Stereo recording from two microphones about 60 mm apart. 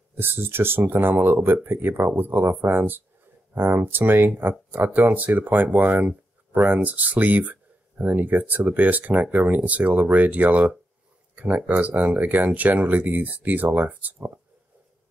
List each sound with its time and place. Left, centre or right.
0.2 s speech: right